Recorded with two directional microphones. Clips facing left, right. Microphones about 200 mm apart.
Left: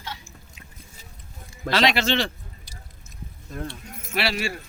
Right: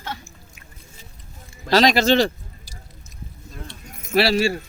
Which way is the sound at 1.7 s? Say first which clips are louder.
Right 6 dB; 40° right (ahead or behind).